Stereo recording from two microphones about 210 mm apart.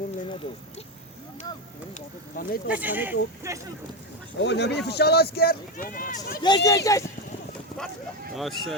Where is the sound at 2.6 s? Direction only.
5° right (ahead or behind).